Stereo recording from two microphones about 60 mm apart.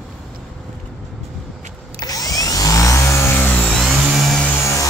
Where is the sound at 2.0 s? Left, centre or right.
Left.